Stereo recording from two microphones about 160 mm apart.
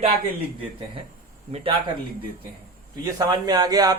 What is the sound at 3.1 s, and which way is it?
Speech, 25° right (ahead or behind).